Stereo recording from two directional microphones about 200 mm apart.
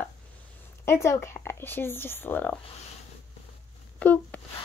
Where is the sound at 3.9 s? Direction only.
5° left (ahead or behind).